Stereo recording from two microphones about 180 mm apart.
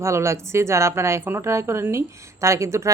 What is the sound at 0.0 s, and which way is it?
Speech, 15° right (ahead or behind).